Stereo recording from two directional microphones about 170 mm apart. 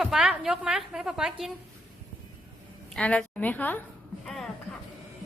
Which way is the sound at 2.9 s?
5° left (ahead or behind).